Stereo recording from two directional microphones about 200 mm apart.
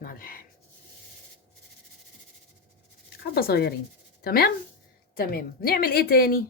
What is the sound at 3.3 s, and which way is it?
A woman's voice, 50° left (ahead or behind).